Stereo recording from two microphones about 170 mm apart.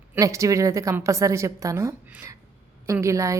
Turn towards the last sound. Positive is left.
turn(degrees=-15)  # may be behind; listen again after turning